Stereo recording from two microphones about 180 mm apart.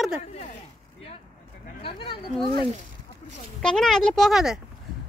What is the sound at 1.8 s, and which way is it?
Speech, 30° left (ahead or behind).